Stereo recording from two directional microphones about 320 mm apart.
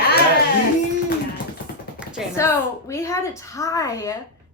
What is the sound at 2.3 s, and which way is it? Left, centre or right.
A woman's voice, centre.